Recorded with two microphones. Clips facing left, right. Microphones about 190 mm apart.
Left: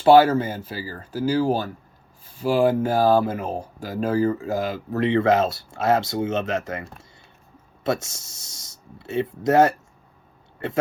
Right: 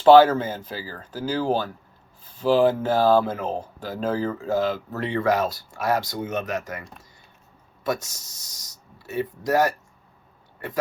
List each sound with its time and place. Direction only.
0.1 s speech: 10° left (ahead or behind)
4.9 s speech: 20° left (ahead or behind)
7.9 s speech: 25° left (ahead or behind)